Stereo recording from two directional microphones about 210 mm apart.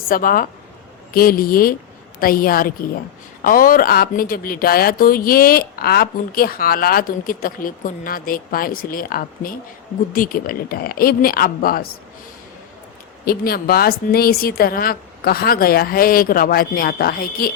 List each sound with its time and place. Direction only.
0.1 s speech: 40° left (ahead or behind)
13.2 s speech: 45° left (ahead or behind)